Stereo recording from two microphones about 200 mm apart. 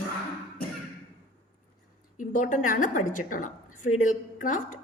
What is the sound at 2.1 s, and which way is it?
A woman's voice, 40° left (ahead or behind).